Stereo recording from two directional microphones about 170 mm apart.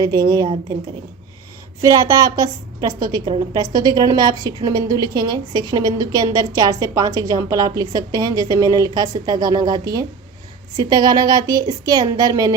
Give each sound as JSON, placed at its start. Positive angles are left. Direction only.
{"t": 0.0, "sound": "a woman's voice", "side_deg": -25}
{"t": 0.4, "sound": "a woman's voice", "side_deg": -35}
{"t": 1.8, "sound": "a woman's voice", "side_deg": -20}